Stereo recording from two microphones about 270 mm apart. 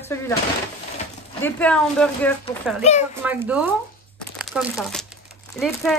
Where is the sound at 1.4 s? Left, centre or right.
Centre.